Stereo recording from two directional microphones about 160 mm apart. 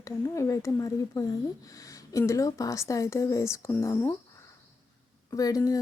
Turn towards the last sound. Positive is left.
turn(degrees=20)  # may be behind; listen again after turning